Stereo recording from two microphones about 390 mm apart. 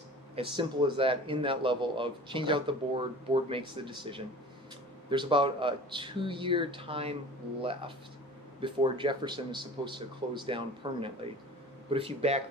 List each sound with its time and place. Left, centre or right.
0.3 s speech: centre